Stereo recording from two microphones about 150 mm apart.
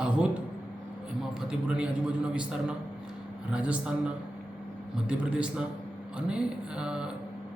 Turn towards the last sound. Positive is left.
turn(degrees=-5)  # may be behind; listen again after turning